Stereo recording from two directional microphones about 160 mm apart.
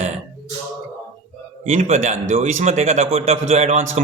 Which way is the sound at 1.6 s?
45° right (ahead or behind).